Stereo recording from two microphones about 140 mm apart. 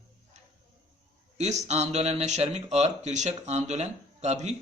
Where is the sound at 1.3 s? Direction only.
55° right (ahead or behind).